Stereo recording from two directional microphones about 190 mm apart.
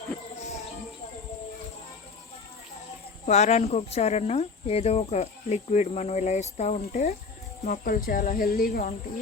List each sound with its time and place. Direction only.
3.2 s speech: 35° left (ahead or behind)
7.6 s speech: 45° left (ahead or behind)